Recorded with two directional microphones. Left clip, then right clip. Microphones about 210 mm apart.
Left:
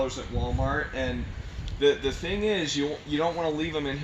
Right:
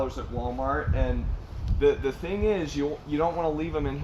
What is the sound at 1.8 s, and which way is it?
Speech, 10° left (ahead or behind).